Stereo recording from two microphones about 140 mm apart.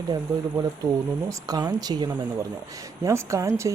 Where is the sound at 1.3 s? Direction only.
25° right (ahead or behind).